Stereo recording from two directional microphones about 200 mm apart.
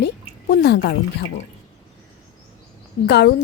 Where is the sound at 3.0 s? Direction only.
55° left (ahead or behind).